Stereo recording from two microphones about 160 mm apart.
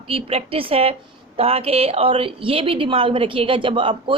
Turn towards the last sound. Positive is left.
turn(degrees=-30)  # may be behind; listen again after turning